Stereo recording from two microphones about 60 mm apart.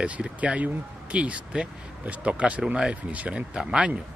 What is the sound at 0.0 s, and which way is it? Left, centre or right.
Speech, right.